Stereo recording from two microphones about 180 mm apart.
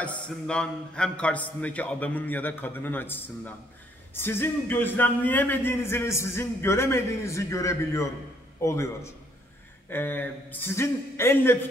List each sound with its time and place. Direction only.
0.0 s a man's voice: 5° left (ahead or behind)